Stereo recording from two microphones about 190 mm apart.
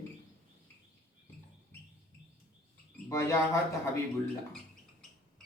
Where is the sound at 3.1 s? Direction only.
15° left (ahead or behind).